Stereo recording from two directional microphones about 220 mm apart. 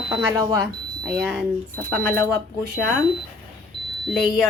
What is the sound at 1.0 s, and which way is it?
Speech, centre (ahead or behind).